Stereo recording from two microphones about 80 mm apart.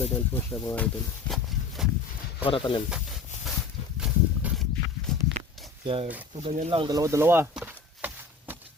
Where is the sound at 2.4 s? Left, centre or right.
Left.